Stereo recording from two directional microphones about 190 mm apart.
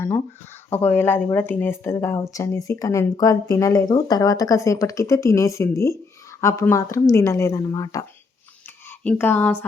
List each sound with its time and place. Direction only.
0.7 s speech: 10° left (ahead or behind)
9.0 s speech: 10° left (ahead or behind)